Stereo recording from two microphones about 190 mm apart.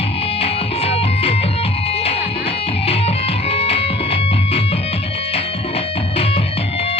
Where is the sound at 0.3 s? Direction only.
30° left (ahead or behind).